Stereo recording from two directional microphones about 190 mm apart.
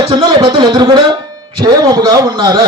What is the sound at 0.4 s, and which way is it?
A man's voice, 25° right (ahead or behind).